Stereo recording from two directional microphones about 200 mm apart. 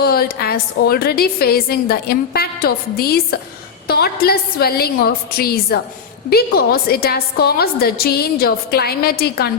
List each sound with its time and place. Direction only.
0.0 s a woman's voice: 50° left (ahead or behind)